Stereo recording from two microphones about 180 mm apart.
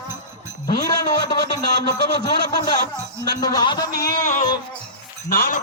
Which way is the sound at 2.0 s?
20° left (ahead or behind).